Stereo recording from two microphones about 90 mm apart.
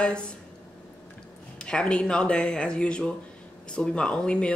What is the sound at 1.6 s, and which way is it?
Speech, 10° left (ahead or behind).